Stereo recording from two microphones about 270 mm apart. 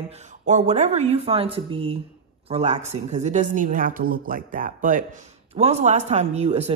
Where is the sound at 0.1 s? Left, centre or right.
Right.